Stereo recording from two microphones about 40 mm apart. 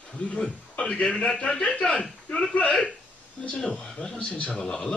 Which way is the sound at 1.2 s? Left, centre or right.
Left.